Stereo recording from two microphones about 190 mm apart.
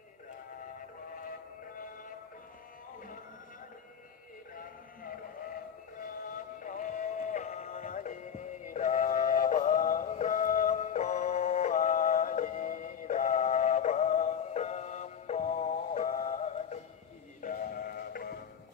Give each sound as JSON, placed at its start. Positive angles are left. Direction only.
{"t": 6.6, "sound": "music", "side_deg": 45}
{"t": 17.4, "sound": "synthetic singing", "side_deg": 45}